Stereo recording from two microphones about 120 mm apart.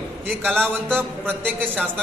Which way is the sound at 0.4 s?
15° right (ahead or behind).